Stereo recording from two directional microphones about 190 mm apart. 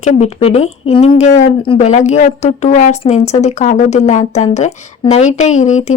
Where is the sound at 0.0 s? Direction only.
35° left (ahead or behind).